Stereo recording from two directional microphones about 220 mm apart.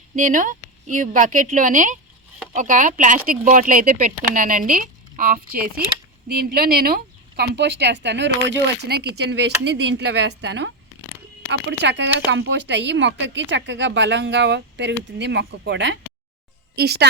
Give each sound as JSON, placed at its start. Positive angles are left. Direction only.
{"t": 0.2, "sound": "speech", "side_deg": -35}
{"t": 11.8, "sound": "speech", "side_deg": -50}